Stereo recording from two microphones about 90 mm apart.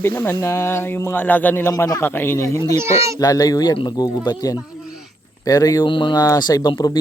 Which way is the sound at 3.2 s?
40° left (ahead or behind).